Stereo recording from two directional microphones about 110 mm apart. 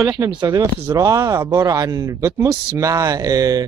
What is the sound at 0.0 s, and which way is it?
Speech, 30° right (ahead or behind).